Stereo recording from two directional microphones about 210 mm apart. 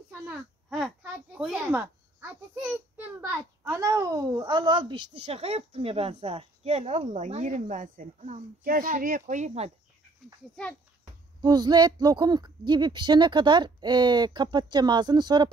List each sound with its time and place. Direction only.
0.3 s a child's voice: centre (ahead or behind); by 9.7 s 30° right (ahead or behind)
10.5 s a child's voice: 5° left (ahead or behind)
11.4 s speech: 20° right (ahead or behind)